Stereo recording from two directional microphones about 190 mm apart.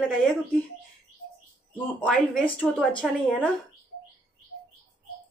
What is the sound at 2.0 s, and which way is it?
Speech, 5° left (ahead or behind).